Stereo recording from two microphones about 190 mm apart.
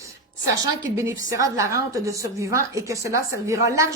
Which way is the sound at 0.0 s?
20° right (ahead or behind).